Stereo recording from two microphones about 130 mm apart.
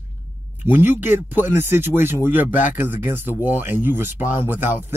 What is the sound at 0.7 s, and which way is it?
Speech, 15° right (ahead or behind).